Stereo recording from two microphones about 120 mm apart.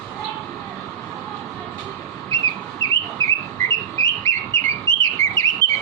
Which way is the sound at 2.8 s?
30° left (ahead or behind).